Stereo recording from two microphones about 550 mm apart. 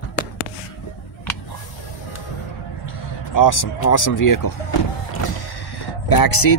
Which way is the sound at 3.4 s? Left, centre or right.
Left.